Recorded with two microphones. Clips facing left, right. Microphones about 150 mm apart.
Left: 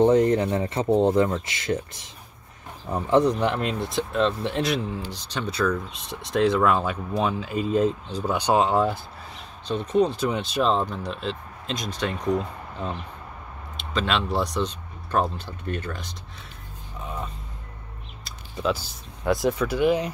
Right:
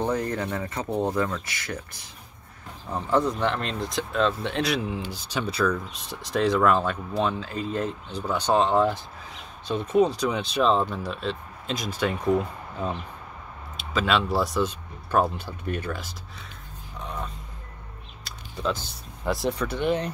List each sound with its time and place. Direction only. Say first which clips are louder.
0.0 s speech: left 9 dB; 20° left (ahead or behind); by 4.8 s centre (ahead or behind)
4.9 s speech: right 1 dB; 10° right (ahead or behind); by 8.9 s 10° left (ahead or behind)
9.7 s speech: even; 5° right (ahead or behind)
18.2 s speech: left 2 dB; 5° left (ahead or behind)